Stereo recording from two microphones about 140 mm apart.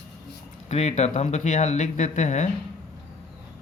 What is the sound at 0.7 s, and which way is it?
Speech, 55° left (ahead or behind).